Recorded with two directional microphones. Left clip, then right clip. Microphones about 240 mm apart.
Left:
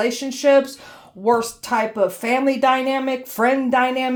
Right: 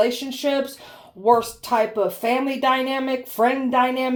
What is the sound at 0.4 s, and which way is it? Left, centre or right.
Speech, left.